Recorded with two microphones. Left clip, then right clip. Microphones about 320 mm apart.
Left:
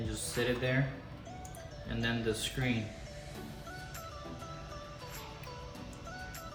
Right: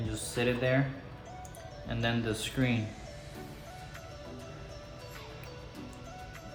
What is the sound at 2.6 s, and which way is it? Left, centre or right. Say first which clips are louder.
Speech: right 3 dB; right.